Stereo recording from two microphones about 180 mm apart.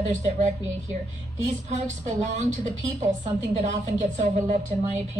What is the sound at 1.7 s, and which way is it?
A woman's voice, 40° right (ahead or behind).